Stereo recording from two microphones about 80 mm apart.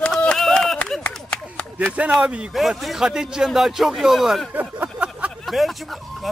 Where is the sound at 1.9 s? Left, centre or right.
Centre.